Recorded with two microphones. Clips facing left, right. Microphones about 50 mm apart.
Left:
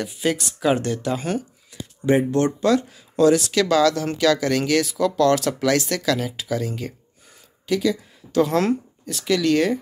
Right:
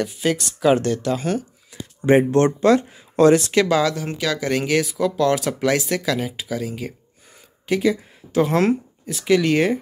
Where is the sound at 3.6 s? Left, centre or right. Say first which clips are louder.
Left 1 dB; centre.